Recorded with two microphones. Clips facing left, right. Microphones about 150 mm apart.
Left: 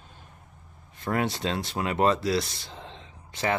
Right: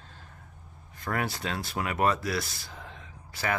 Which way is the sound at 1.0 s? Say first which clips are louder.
Left 4 dB; 25° left (ahead or behind).